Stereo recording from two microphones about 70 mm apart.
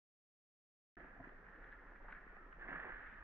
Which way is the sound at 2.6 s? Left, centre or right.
Right.